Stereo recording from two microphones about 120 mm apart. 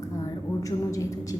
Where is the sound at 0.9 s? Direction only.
30° left (ahead or behind).